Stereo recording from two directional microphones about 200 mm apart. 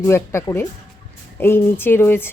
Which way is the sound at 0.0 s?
15° left (ahead or behind).